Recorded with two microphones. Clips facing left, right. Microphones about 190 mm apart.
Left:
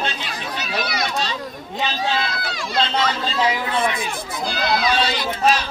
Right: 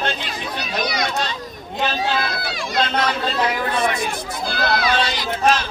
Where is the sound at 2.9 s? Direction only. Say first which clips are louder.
Right 1 dB; 55° right (ahead or behind).